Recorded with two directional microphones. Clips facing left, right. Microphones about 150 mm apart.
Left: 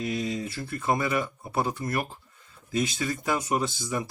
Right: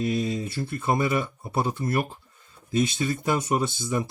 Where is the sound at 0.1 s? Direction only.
25° right (ahead or behind).